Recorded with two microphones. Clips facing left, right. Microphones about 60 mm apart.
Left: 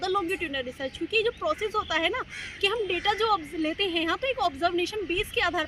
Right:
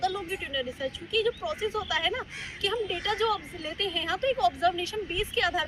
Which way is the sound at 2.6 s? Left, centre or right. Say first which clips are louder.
Left 3 dB; left.